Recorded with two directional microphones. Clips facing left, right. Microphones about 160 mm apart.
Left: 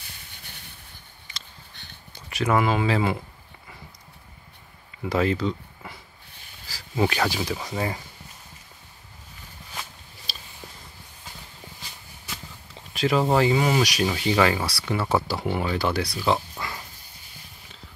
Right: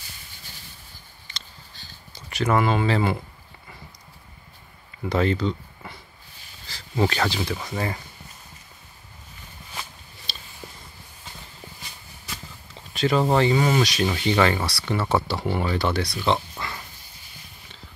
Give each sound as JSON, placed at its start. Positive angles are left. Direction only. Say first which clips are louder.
{"t": 1.7, "sound": "a sound", "louder": "even", "side_deg": 60}
{"t": 2.2, "sound": "speech", "louder": "right 1 dB", "side_deg": 5}
{"t": 5.0, "sound": "speech", "louder": "right 1 dB", "side_deg": 5}
{"t": 12.3, "sound": "speech", "louder": "even", "side_deg": 5}